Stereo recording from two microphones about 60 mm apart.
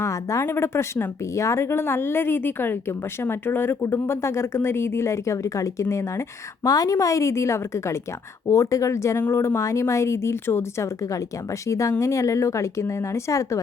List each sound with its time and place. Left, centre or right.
0.0 s a woman's voice: left
0.4 s a woman's voice: left
6.7 s speech: left
11.7 s speech: left